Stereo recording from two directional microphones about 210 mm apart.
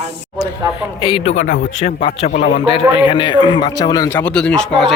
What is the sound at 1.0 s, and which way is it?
A man's voice, 25° left (ahead or behind).